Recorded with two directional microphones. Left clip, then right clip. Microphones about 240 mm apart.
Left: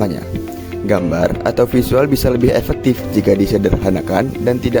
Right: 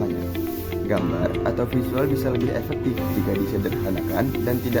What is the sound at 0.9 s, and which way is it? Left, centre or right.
Speech, left.